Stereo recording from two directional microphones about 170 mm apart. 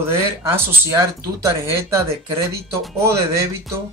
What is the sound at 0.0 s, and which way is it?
Speech, 15° right (ahead or behind).